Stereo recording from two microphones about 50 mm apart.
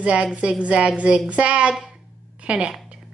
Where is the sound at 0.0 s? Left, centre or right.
Right.